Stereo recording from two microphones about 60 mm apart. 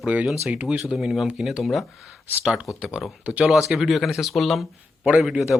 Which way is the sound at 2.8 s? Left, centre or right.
Centre.